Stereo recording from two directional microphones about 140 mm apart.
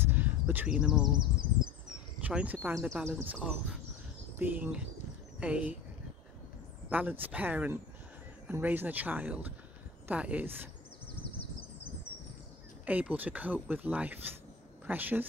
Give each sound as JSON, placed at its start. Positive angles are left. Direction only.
{"t": 0.1, "sound": "speech", "side_deg": -15}
{"t": 3.3, "sound": "speech", "side_deg": 0}
{"t": 4.4, "sound": "speech", "side_deg": -10}
{"t": 6.9, "sound": "speech", "side_deg": -15}
{"t": 12.8, "sound": "speech", "side_deg": -10}